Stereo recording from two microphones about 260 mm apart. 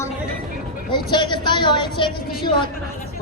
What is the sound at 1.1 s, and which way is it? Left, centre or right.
Speech, centre.